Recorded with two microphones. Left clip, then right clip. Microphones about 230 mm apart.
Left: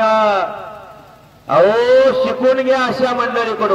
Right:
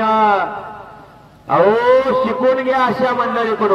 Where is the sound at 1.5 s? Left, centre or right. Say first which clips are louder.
Left 1 dB; left.